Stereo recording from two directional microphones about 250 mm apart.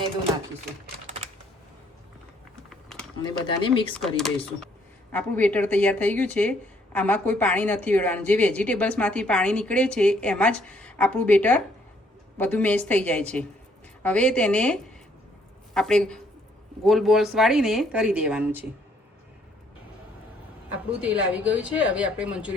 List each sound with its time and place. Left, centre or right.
2.6 s typing: centre
3.2 s speech: centre
3.9 s speech: centre
21.0 s speech: centre